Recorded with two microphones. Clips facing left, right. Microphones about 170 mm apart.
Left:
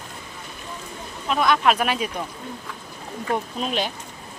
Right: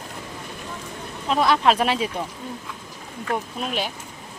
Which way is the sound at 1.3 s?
30° right (ahead or behind).